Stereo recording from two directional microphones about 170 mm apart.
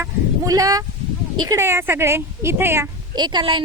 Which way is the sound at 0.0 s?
20° right (ahead or behind).